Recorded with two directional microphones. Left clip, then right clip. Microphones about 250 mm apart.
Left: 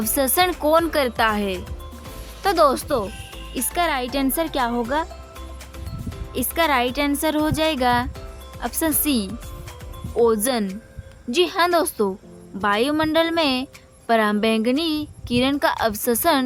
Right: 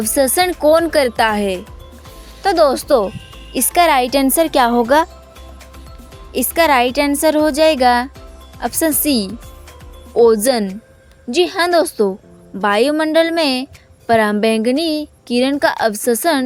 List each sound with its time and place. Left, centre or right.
0.0 s a woman's voice: centre
6.3 s a woman's voice: right